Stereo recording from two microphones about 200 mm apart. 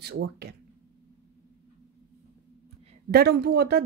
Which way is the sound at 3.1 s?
55° right (ahead or behind).